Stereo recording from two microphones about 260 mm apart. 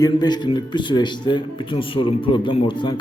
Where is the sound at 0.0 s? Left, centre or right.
Centre.